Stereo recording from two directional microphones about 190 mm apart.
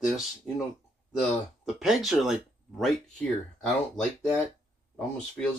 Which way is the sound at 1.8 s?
Centre (ahead or behind).